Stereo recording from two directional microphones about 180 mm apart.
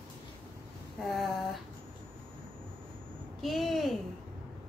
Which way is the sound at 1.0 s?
Centre (ahead or behind).